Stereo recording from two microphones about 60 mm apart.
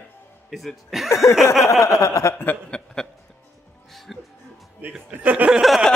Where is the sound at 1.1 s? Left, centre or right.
Left.